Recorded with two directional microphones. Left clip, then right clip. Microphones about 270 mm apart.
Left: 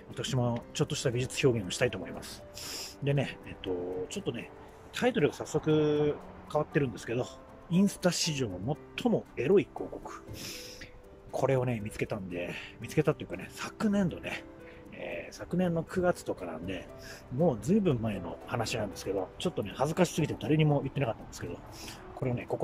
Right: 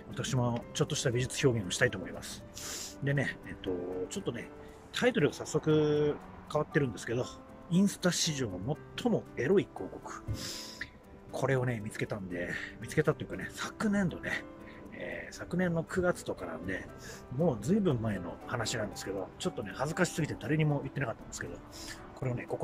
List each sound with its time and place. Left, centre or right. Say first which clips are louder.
0.1 s speech: left 1 dB; centre